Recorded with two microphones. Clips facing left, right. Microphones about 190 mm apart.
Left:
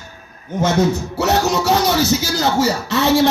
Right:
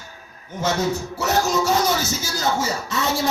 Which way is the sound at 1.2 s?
70° left (ahead or behind).